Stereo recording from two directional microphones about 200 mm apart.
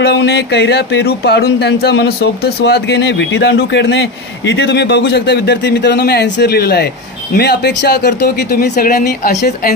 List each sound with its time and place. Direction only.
0.0 s speech: 55° left (ahead or behind)